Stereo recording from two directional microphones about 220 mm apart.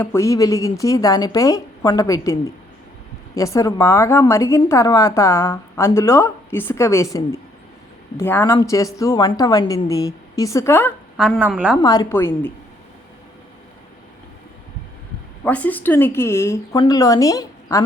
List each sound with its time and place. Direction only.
0.0 s a woman's voice: 10° left (ahead or behind)
11.2 s a woman's voice: 5° right (ahead or behind)
11.8 s a woman's voice: 15° left (ahead or behind)
15.4 s a woman's voice: 5° left (ahead or behind)